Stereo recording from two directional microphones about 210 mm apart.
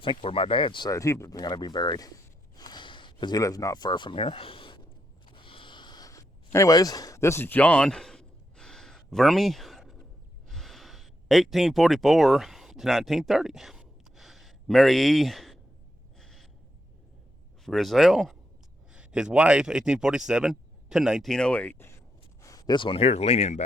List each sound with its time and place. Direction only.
0.0 s speech: 25° left (ahead or behind)
5.3 s a sound: 25° left (ahead or behind); by 16.5 s centre (ahead or behind)
17.7 s speech: centre (ahead or behind); by 23.6 s 30° left (ahead or behind)